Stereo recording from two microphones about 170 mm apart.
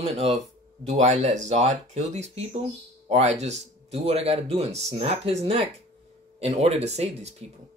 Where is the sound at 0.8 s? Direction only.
40° right (ahead or behind).